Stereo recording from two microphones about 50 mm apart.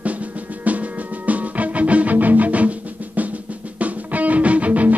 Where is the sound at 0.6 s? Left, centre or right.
Right.